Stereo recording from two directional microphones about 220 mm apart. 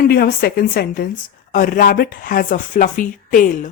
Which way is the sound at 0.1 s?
45° left (ahead or behind).